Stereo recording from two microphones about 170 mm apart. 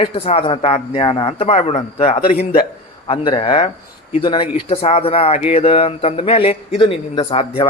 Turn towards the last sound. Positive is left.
turn(degrees=30)  # may be behind; listen again after turning